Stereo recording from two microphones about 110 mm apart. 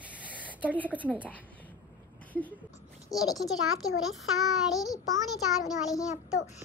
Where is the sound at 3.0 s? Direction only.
35° left (ahead or behind).